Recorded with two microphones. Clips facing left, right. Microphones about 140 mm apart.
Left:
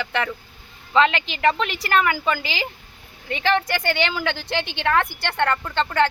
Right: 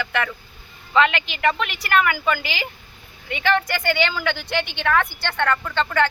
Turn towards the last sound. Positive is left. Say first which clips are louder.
# even
turn(degrees=30)  # may be behind; listen again after turning